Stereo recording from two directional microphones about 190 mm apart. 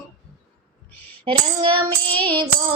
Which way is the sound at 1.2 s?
25° right (ahead or behind).